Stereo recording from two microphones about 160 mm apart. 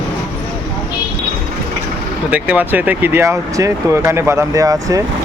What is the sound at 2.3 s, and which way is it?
Speech, 10° right (ahead or behind).